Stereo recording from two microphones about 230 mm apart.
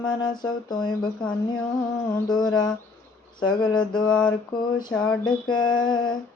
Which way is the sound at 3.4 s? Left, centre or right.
Centre.